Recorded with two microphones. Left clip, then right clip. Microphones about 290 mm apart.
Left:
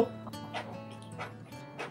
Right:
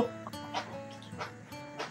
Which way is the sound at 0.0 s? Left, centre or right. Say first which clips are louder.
Left 2 dB; centre.